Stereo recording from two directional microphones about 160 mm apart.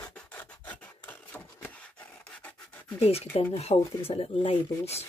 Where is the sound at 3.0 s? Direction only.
40° left (ahead or behind).